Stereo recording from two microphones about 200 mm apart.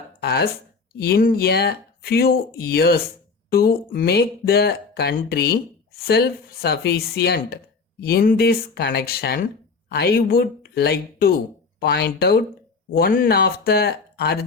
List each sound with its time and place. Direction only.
0.2 s speech: 55° left (ahead or behind)